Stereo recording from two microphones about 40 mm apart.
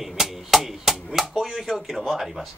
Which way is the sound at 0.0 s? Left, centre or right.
Centre.